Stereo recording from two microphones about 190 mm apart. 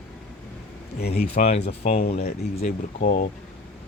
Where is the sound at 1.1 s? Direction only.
35° left (ahead or behind).